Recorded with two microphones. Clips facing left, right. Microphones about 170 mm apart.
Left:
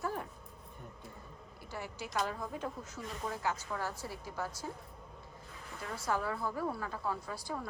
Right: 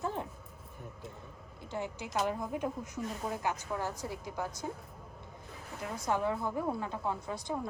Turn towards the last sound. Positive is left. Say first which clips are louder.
# right 4 dB
turn(degrees=-20)  # may be behind; listen again after turning